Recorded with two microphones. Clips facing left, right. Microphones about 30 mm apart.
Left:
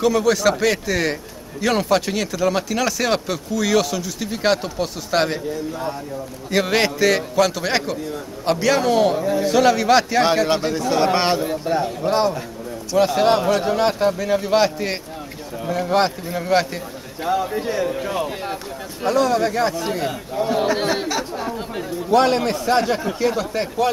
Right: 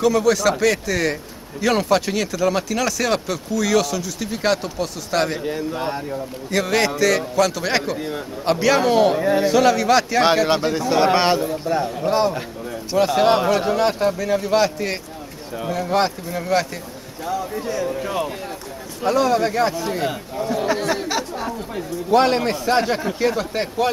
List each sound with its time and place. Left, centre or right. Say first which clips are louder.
0.0 s a man's voice: even; centre
5.7 s speech: right 2 dB; right
6.5 s a man's voice: left 1 dB; centre
9.2 s speech: right 2 dB; right
9.5 s speech: left 2 dB; centre
10.2 s a man's voice: right 1 dB; centre
11.7 s a man's voice: even; centre
13.7 s a man's voice: even; centre
17.2 s a man's voice: left 4 dB; left
17.9 s speech: even; centre
20.4 s a man's voice: left 4 dB; left
22.1 s a man's voice: even; centre